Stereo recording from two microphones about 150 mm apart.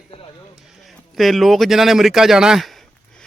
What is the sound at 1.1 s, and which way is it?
A man's voice, centre (ahead or behind).